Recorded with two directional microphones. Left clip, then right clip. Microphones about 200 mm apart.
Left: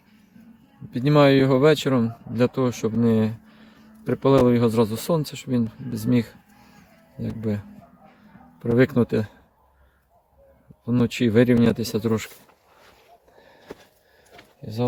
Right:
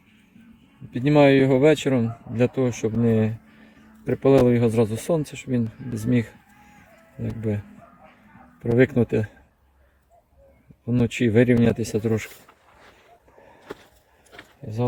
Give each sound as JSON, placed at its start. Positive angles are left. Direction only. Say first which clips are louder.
{"t": 0.9, "sound": "speech", "louder": "even", "side_deg": 5}
{"t": 5.9, "sound": "cat", "louder": "left 1 dB", "side_deg": 0}
{"t": 7.2, "sound": "speech", "louder": "even", "side_deg": 0}
{"t": 10.8, "sound": "speech", "louder": "even", "side_deg": 0}
{"t": 14.3, "sound": "a sound", "louder": "left 1 dB", "side_deg": 0}